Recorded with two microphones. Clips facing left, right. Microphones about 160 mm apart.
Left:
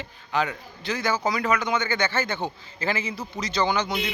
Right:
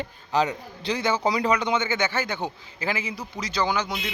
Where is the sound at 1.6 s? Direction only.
25° right (ahead or behind).